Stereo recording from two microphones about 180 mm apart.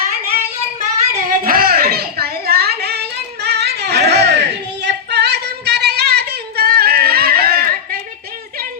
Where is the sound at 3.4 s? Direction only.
65° right (ahead or behind).